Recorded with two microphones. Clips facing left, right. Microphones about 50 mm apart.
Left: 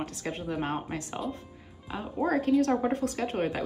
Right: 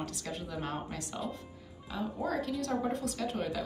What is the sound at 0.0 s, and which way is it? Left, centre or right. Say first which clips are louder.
A woman's voice: left 5 dB; left.